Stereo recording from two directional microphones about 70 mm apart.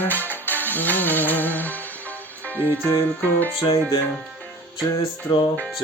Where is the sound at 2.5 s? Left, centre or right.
Left.